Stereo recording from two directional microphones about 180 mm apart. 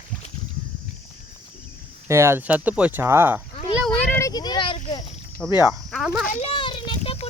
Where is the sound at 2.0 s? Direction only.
15° right (ahead or behind).